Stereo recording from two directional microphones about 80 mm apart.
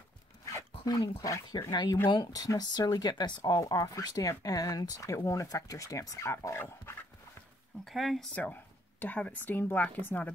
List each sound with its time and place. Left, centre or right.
0.8 s speech: left
1.2 s speech: left
1.7 s speech: left
2.3 s speech: left
7.8 s speech: centre
8.4 s speech: left